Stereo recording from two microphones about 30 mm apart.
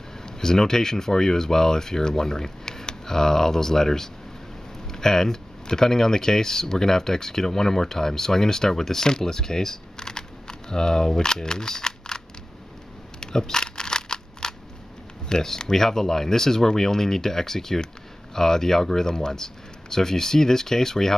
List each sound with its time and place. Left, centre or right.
0.2 s speech: centre
13.2 s camera: centre
15.2 s speech: left